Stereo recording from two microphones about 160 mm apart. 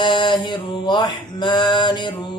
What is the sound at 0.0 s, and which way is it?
Mantra, 30° left (ahead or behind).